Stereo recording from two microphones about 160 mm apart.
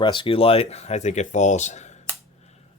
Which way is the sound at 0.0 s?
30° left (ahead or behind).